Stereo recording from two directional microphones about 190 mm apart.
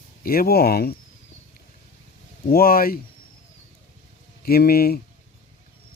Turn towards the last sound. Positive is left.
turn(degrees=55)  # may be behind; listen again after turning